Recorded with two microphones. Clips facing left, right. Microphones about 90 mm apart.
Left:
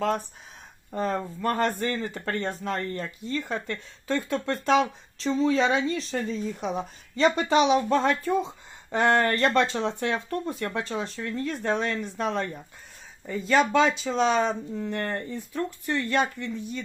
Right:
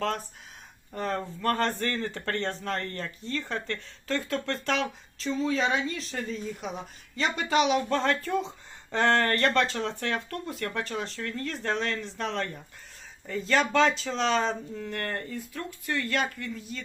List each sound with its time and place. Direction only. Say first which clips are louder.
0.9 s speech: left 3 dB; 20° left (ahead or behind)
5.1 s speech: left 5 dB; 30° left (ahead or behind)
7.6 s speech: left 3 dB; 25° left (ahead or behind)
13.5 s speech: left 2 dB; 15° left (ahead or behind)